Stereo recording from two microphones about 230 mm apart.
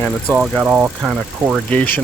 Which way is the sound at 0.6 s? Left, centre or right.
Centre.